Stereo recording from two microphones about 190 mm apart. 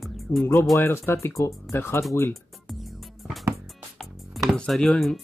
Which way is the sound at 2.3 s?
Centre (ahead or behind).